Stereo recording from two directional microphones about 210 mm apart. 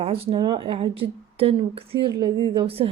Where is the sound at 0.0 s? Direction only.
25° right (ahead or behind).